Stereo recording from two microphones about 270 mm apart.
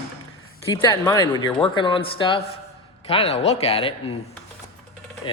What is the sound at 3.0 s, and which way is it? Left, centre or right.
Cutlery, left.